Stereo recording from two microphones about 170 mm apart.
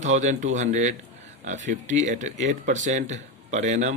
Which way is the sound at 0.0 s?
45° right (ahead or behind).